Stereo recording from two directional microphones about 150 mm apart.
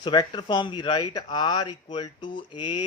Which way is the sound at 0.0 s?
30° left (ahead or behind).